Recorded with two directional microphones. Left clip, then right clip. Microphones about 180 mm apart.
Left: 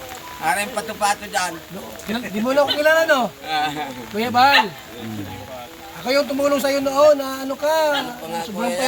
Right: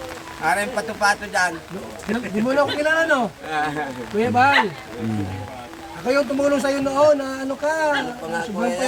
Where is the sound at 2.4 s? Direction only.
10° right (ahead or behind).